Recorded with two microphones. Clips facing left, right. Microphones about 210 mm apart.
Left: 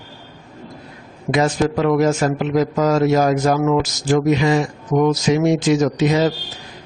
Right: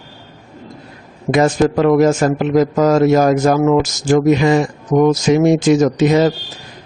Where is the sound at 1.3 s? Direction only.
50° right (ahead or behind).